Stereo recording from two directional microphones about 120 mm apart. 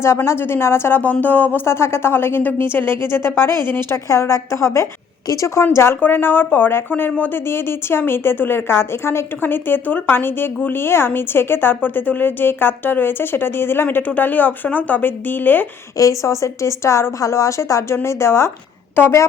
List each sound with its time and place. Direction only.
0.2 s speech: 20° left (ahead or behind)
16.0 s speech: 25° left (ahead or behind)